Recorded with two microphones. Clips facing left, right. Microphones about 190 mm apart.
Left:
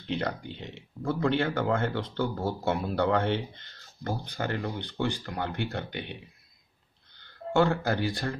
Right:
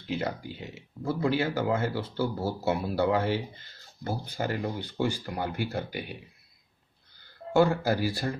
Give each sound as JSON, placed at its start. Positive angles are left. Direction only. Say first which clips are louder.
{"t": 0.0, "sound": "speech", "louder": "even", "side_deg": -5}
{"t": 7.2, "sound": "speech", "louder": "right 2 dB", "side_deg": -5}